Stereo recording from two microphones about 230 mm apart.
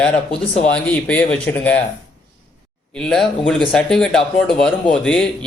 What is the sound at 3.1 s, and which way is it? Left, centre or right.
A man's voice, centre.